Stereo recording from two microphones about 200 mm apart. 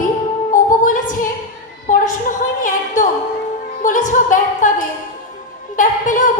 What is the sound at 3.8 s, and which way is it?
Music, 40° left (ahead or behind).